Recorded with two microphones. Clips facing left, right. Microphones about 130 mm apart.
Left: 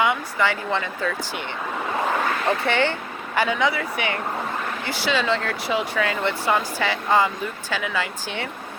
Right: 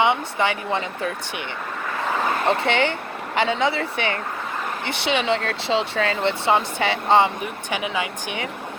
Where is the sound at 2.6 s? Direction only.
20° right (ahead or behind).